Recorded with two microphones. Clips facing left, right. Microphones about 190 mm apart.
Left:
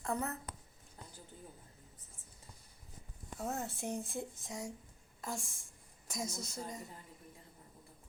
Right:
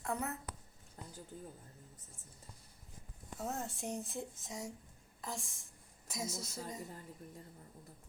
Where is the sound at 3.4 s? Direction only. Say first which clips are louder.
Left 1 dB; centre (ahead or behind).